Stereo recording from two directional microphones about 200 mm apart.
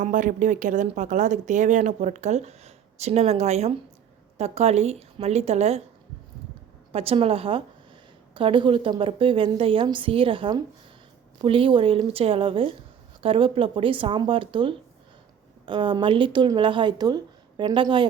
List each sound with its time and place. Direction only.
0.0 s speech: 40° right (ahead or behind)
6.9 s a woman's voice: 30° right (ahead or behind)